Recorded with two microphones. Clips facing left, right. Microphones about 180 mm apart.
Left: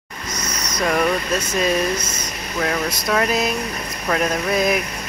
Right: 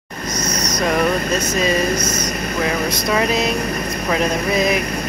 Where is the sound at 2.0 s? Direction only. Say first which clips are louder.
Right 7 dB; 25° left (ahead or behind).